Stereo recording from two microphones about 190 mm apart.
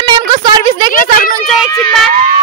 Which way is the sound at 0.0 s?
25° right (ahead or behind).